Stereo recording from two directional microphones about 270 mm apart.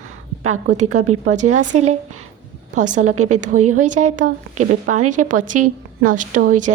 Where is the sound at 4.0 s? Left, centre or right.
Right.